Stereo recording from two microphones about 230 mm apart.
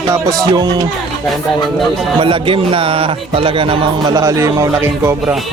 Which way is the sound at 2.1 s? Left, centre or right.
Right.